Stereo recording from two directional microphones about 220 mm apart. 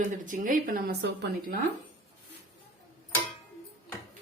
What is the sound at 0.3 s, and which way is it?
A woman's voice, 35° right (ahead or behind).